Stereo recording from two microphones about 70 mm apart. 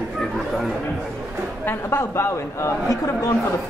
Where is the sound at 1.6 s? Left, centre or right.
Left.